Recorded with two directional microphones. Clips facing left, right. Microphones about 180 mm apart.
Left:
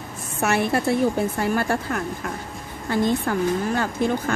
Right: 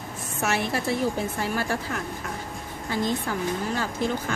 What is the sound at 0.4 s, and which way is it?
Speech, 55° left (ahead or behind).